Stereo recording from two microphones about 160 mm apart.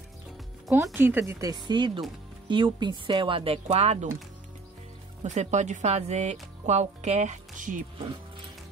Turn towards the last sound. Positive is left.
turn(degrees=-55)  # may be behind; listen again after turning